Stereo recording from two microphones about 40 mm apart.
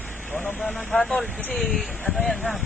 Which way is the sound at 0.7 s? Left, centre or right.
Left.